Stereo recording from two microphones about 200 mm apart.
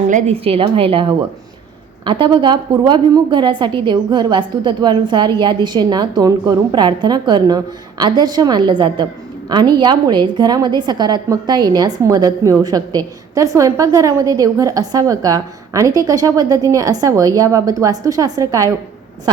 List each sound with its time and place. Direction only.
0.1 s a woman's voice: 35° right (ahead or behind); by 18.7 s 15° right (ahead or behind)